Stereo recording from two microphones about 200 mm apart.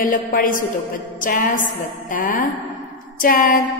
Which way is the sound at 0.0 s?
45° left (ahead or behind).